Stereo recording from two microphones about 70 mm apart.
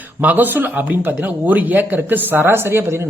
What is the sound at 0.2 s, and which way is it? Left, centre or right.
A man's voice, right.